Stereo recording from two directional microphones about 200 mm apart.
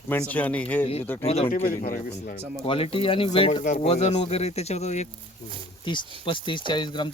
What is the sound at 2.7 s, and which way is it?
Speech, 30° left (ahead or behind).